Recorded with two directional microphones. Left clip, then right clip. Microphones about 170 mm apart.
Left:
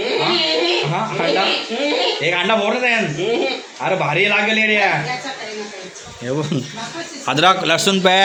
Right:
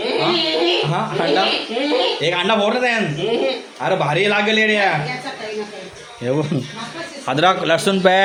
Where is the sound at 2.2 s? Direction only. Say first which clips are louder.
Even; 10° right (ahead or behind).